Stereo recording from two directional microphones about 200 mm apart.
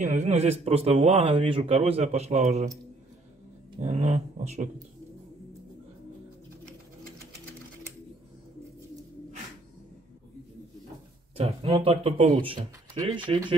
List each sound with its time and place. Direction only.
0.0 s a man's voice: 35° right (ahead or behind)
3.8 s a man's voice: 35° right (ahead or behind)
11.3 s speech: 30° right (ahead or behind)